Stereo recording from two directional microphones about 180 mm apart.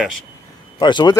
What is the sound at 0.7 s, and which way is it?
Speech, 25° left (ahead or behind).